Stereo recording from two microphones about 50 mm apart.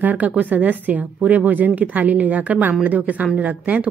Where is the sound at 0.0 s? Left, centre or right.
Right.